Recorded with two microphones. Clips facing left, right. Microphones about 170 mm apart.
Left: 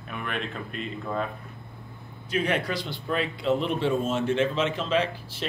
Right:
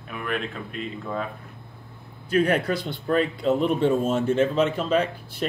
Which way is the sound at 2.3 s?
50° right (ahead or behind).